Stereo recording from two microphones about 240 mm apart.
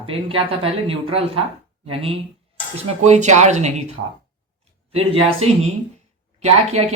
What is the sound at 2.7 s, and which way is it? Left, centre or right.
Speech, right.